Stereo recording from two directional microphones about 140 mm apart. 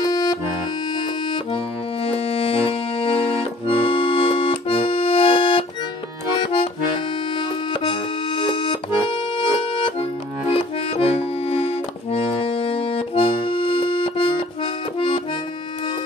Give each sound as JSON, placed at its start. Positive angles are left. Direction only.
{"t": 0.1, "sound": "accordion", "side_deg": 30}
{"t": 2.0, "sound": "accordion", "side_deg": 45}